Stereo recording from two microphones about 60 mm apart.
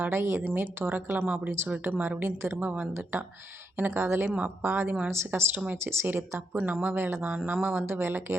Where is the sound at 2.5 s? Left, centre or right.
Right.